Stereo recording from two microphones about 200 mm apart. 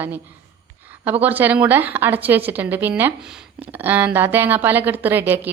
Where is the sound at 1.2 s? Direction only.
10° right (ahead or behind).